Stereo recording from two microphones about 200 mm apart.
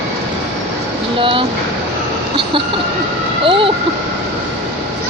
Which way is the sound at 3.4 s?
25° right (ahead or behind).